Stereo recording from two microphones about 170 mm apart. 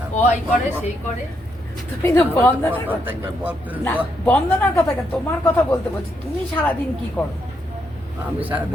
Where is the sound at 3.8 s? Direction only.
10° left (ahead or behind).